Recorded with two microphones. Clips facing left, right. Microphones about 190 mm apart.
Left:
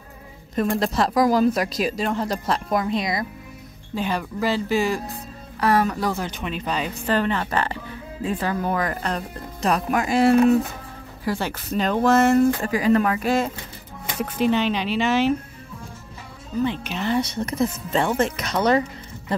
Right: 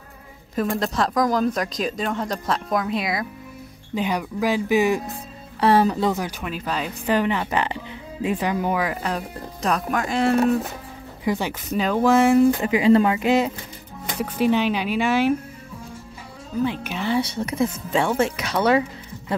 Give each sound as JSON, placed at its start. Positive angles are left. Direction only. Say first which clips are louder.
{"t": 0.6, "sound": "speech", "louder": "left 1 dB", "side_deg": 0}
{"t": 3.9, "sound": "speech", "louder": "right 1 dB", "side_deg": -15}
{"t": 6.2, "sound": "speech", "louder": "even", "side_deg": -5}
{"t": 7.1, "sound": "speech", "louder": "right 2 dB", "side_deg": -15}
{"t": 9.6, "sound": "speech", "louder": "left 2 dB", "side_deg": 5}
{"t": 11.2, "sound": "speech", "louder": "right 2 dB", "side_deg": -15}
{"t": 16.8, "sound": "speech", "louder": "even", "side_deg": -10}